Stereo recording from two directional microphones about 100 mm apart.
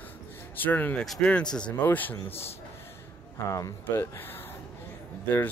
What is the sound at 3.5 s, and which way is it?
Speech, 25° left (ahead or behind).